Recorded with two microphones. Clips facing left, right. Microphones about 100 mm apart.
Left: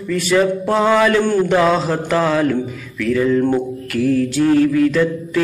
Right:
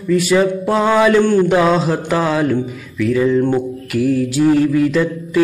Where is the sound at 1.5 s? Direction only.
5° right (ahead or behind).